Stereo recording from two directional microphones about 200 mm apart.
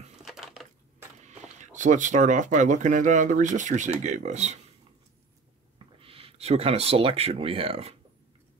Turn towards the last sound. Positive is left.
turn(degrees=-30)  # may be behind; listen again after turning